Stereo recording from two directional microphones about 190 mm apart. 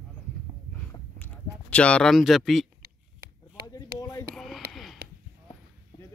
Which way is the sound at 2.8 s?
50° right (ahead or behind).